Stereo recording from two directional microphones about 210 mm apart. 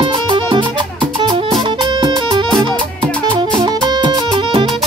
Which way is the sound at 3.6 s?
20° right (ahead or behind).